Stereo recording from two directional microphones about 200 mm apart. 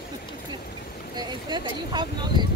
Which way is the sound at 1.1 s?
20° right (ahead or behind).